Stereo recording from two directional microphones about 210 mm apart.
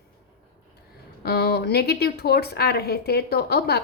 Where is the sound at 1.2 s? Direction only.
50° left (ahead or behind).